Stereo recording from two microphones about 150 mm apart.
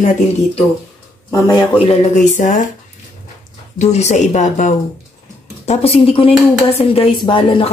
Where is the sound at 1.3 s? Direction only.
30° left (ahead or behind).